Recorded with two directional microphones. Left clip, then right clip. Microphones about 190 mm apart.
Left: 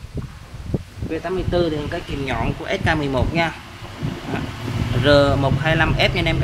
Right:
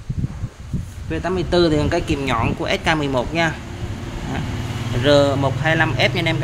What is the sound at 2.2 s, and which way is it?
Speech, 25° right (ahead or behind).